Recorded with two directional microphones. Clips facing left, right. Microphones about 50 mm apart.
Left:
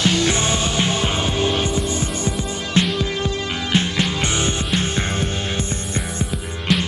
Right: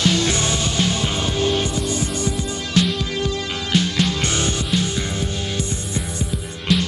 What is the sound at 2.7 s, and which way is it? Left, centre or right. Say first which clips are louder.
Music: even; left.